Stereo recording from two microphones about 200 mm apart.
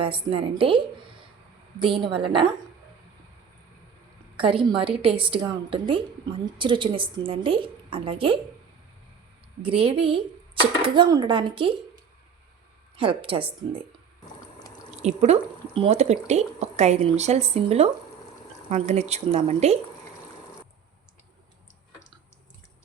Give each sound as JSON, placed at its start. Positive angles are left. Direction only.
{"t": 0.0, "sound": "a woman's voice", "side_deg": -25}
{"t": 4.4, "sound": "a woman's voice", "side_deg": -25}
{"t": 9.6, "sound": "a woman's voice", "side_deg": -25}
{"t": 13.0, "sound": "a woman's voice", "side_deg": -25}
{"t": 14.8, "sound": "speech", "side_deg": -35}